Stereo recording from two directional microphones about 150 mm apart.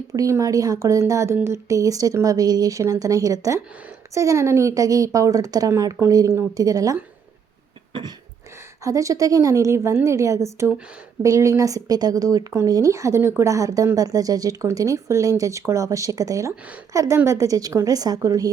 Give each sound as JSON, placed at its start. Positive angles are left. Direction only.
{"t": 0.1, "sound": "speech", "side_deg": -20}
{"t": 8.8, "sound": "speech", "side_deg": -20}